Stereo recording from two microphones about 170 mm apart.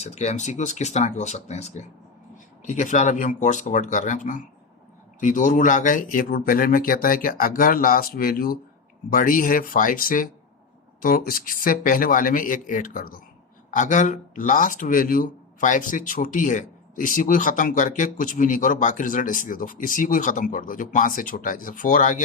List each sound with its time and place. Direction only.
0.0 s speech: 40° left (ahead or behind)